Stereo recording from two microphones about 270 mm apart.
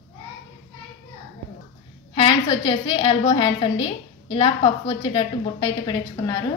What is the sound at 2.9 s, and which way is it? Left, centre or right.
A woman's voice, centre.